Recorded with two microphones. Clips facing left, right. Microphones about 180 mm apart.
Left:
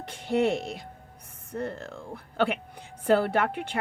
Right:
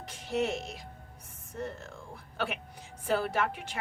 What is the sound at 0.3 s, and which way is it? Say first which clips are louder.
A woman's voice: left 6 dB; 60° left (ahead or behind).